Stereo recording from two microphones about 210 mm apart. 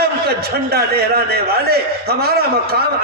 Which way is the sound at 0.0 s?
50° right (ahead or behind).